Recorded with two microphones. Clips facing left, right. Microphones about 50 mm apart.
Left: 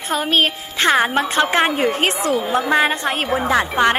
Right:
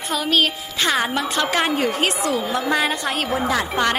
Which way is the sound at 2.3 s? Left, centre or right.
Left.